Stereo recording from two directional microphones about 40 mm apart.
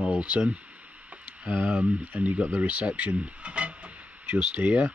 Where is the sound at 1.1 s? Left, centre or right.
Right.